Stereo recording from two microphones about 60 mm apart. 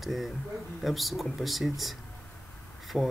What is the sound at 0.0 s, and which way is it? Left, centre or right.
Speech, centre.